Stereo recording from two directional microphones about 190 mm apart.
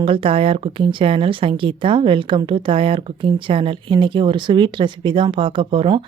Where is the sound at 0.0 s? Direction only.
30° right (ahead or behind).